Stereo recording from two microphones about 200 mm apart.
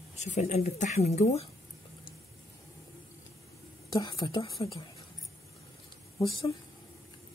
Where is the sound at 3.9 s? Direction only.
25° left (ahead or behind).